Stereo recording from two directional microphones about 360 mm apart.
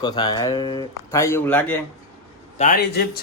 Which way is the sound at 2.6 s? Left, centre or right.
Left.